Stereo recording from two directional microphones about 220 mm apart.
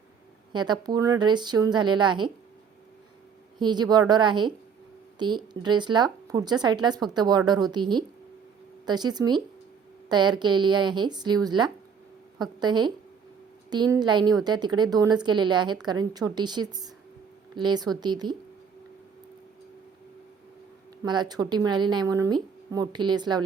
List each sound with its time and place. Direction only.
0.5 s a woman's voice: 20° right (ahead or behind)
3.6 s a woman's voice: 20° right (ahead or behind)
21.0 s a woman's voice: 20° right (ahead or behind)